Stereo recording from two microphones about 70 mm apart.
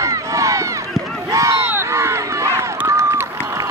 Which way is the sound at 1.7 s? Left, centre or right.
Right.